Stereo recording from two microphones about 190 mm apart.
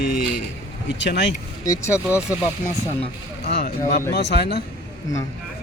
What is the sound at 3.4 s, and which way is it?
Speech, 55° left (ahead or behind).